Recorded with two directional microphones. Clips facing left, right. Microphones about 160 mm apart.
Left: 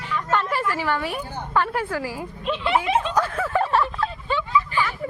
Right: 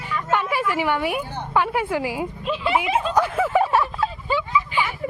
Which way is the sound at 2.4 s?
5° right (ahead or behind).